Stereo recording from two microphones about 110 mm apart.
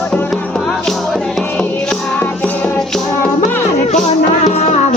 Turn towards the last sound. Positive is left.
turn(degrees=80)